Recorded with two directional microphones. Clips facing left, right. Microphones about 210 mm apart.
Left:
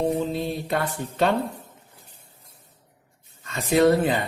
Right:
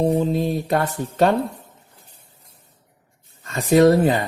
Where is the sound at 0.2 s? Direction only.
45° right (ahead or behind).